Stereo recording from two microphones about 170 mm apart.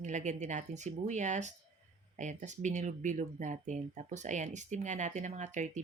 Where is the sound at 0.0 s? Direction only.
45° right (ahead or behind).